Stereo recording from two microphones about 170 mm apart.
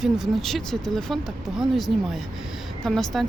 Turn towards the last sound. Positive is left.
turn(degrees=0)  # may be behind; listen again after turning